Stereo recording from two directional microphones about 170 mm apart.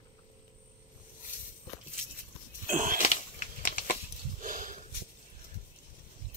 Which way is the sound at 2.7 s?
50° right (ahead or behind).